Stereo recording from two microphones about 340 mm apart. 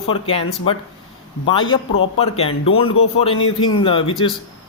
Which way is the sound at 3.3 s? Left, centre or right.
Left.